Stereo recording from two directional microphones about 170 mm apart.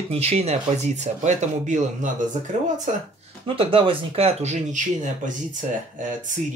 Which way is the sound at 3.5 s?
30° right (ahead or behind).